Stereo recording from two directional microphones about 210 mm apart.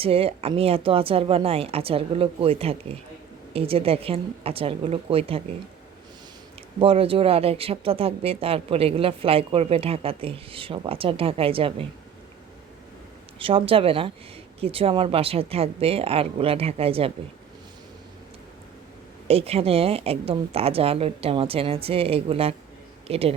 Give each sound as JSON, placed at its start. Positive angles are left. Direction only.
{"t": 0.0, "sound": "speech", "side_deg": -25}
{"t": 6.7, "sound": "speech", "side_deg": -25}
{"t": 13.4, "sound": "speech", "side_deg": -25}
{"t": 19.3, "sound": "speech", "side_deg": -30}